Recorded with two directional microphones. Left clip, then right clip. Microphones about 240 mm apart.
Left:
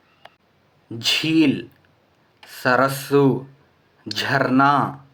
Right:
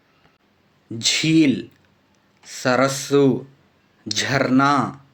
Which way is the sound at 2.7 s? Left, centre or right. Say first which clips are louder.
Left 1 dB; right.